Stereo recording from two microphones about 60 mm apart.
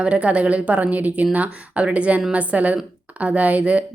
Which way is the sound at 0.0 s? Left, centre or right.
Centre.